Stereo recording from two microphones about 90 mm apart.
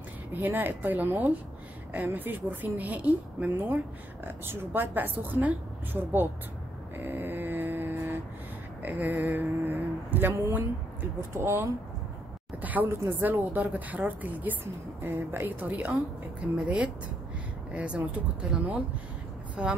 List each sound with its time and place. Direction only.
0.3 s a woman's voice: 20° right (ahead or behind)
7.0 s vehicle: 20° right (ahead or behind)
8.8 s speech: 20° right (ahead or behind)
12.8 s a woman's voice: 25° right (ahead or behind)